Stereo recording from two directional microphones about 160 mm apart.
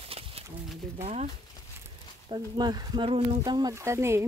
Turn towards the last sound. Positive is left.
turn(degrees=-15)  # may be behind; listen again after turning